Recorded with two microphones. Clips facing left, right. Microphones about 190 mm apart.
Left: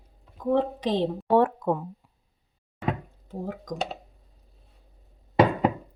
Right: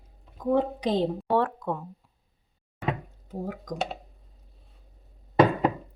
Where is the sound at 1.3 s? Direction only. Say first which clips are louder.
Left 6 dB; 20° left (ahead or behind).